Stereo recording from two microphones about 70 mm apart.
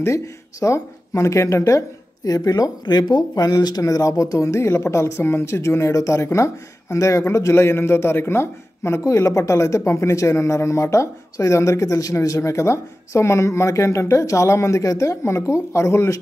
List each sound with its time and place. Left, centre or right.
0.0 s speech: left
3.8 s a man's voice: left